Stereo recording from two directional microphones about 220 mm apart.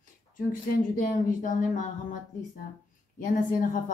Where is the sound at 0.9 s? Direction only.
40° left (ahead or behind).